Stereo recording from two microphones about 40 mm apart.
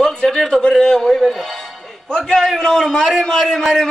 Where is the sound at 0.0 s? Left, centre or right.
Centre.